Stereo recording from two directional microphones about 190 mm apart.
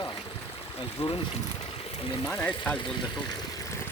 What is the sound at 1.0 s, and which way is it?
Speech, 30° left (ahead or behind).